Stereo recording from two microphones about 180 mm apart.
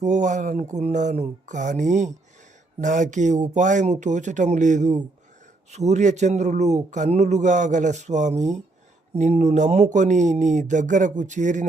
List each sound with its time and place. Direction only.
0.0 s a man's voice: 40° right (ahead or behind)